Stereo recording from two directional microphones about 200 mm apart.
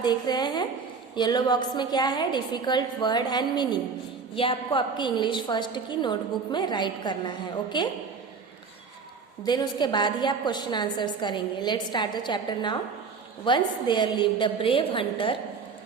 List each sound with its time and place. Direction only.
0.0 s a woman's voice: 20° left (ahead or behind)
9.5 s a woman's voice: 20° left (ahead or behind)